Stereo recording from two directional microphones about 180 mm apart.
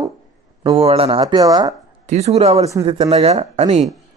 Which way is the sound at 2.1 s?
35° right (ahead or behind).